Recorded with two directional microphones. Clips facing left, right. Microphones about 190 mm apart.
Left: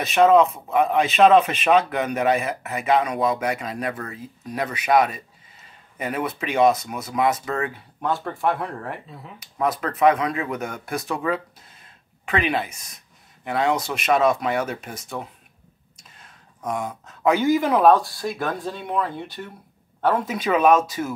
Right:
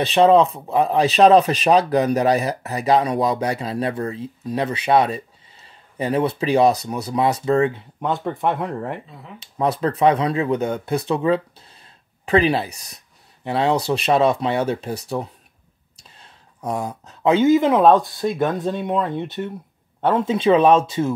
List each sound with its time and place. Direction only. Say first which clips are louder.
0.0 s speech: right 2 dB; 30° right (ahead or behind)
9.4 s speech: right 4 dB; 30° right (ahead or behind)